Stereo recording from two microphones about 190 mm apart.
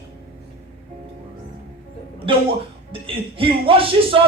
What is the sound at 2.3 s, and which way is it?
A woman's voice, 30° right (ahead or behind).